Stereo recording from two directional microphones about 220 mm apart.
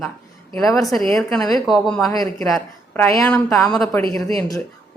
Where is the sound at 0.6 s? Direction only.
15° left (ahead or behind).